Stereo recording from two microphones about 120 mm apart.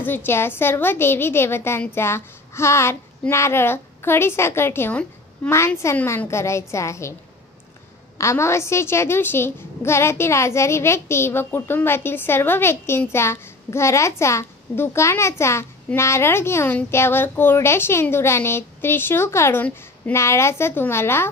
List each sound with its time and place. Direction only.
0.0 s a child's voice: 15° left (ahead or behind)
8.2 s a child's voice: 25° left (ahead or behind)